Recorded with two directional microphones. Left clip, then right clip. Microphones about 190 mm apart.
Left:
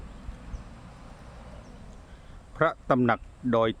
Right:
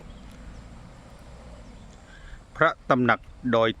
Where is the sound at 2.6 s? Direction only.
10° left (ahead or behind).